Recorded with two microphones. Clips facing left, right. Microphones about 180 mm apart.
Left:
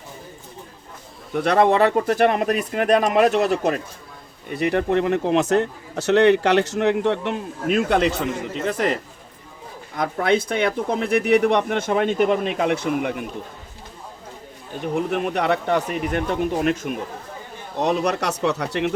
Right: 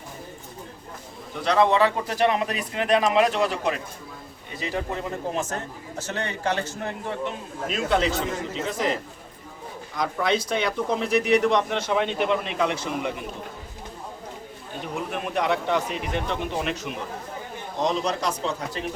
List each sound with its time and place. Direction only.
1.4 s speech: 55° left (ahead or behind)
4.4 s a man's voice: 60° left (ahead or behind)
9.9 s speech: 55° left (ahead or behind)
14.9 s speech: 60° left (ahead or behind)
17.7 s a man's voice: 65° left (ahead or behind)